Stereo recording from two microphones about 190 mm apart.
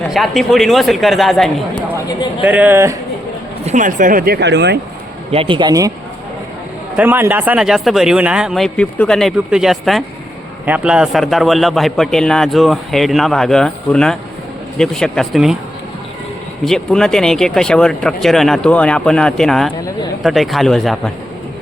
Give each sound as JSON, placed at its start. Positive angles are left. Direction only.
{"t": 0.1, "sound": "a man's voice", "side_deg": 0}
{"t": 3.7, "sound": "speech", "side_deg": -40}
{"t": 5.3, "sound": "speech", "side_deg": -30}
{"t": 6.9, "sound": "a man's voice", "side_deg": -10}
{"t": 16.6, "sound": "a man's voice", "side_deg": 5}